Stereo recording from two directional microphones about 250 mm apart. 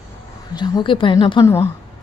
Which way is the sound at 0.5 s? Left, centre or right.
Centre.